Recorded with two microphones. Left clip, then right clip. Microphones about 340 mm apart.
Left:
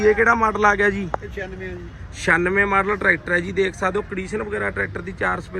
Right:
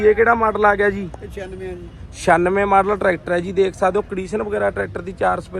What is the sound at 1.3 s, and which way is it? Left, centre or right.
Speech, centre.